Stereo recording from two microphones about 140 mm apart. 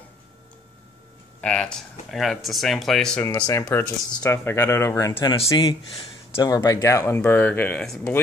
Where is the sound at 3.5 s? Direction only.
20° left (ahead or behind).